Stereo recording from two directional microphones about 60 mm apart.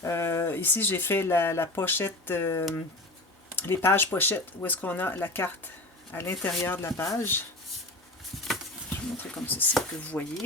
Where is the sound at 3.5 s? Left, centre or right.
Left.